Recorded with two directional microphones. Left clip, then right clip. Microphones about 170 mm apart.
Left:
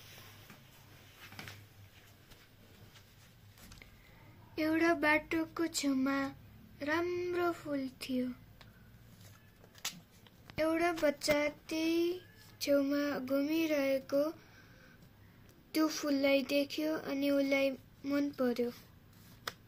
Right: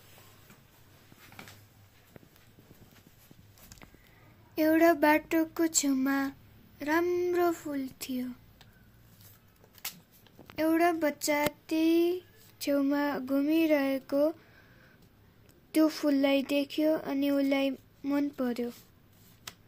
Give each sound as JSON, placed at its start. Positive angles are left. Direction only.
{"t": 4.6, "sound": "speech", "side_deg": -50}
{"t": 10.5, "sound": "speech", "side_deg": -60}
{"t": 15.7, "sound": "speech", "side_deg": -50}